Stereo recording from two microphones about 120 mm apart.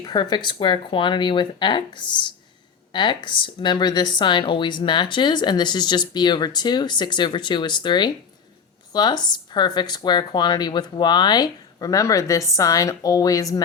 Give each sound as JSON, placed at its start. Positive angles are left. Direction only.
{"t": 0.0, "sound": "speech", "side_deg": 35}